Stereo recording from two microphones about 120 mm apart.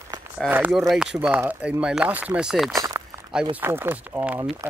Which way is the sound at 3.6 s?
20° right (ahead or behind).